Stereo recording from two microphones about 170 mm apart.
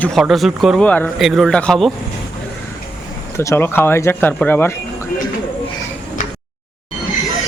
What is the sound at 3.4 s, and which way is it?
A man's voice, 15° left (ahead or behind).